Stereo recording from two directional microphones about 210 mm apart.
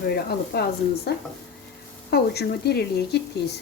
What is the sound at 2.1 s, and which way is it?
Speech, 50° left (ahead or behind).